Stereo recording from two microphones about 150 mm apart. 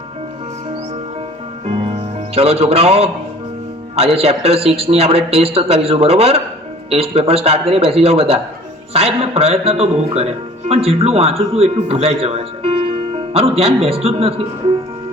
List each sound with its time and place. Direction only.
1.6 s music: 45° right (ahead or behind)
3.9 s a man's voice: 40° right (ahead or behind)